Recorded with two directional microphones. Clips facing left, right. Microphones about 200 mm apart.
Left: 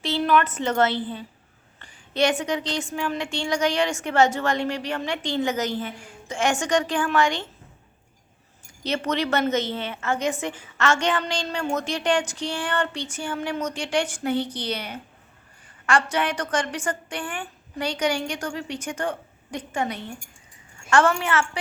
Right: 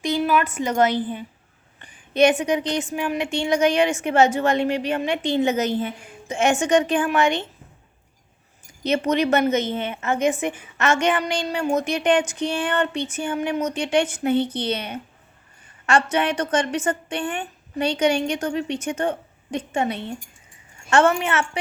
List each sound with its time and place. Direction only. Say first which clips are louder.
0.0 s a woman's voice: right 1 dB; 10° right (ahead or behind)
8.8 s a woman's voice: right 5 dB; 20° right (ahead or behind)